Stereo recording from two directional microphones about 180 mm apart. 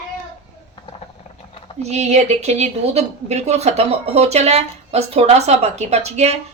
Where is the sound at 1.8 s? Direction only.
40° right (ahead or behind).